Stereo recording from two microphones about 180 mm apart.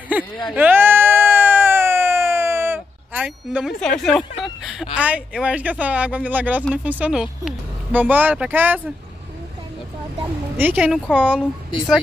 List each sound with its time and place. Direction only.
0.5 s a sound: 10° right (ahead or behind)
4.9 s speech: 5° right (ahead or behind)
10.6 s speech: 10° right (ahead or behind)